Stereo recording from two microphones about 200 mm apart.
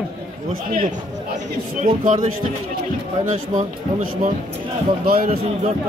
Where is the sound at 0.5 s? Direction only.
45° right (ahead or behind).